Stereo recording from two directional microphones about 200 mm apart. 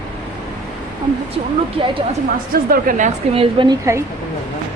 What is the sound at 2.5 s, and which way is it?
Speech, 45° right (ahead or behind).